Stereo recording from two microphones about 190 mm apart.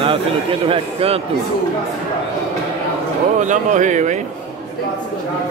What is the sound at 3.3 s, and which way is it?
Speech, 40° right (ahead or behind).